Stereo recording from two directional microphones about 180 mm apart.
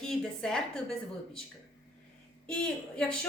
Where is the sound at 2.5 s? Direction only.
5° left (ahead or behind).